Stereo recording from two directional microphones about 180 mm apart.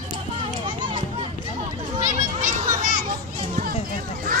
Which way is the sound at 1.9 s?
40° right (ahead or behind).